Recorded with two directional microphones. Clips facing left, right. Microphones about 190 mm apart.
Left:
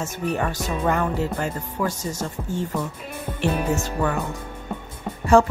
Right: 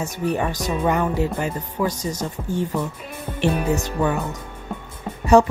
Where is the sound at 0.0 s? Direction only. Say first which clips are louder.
Right 2 dB; 15° right (ahead or behind).